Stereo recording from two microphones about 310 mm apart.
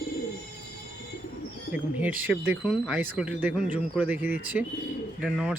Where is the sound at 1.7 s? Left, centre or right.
Centre.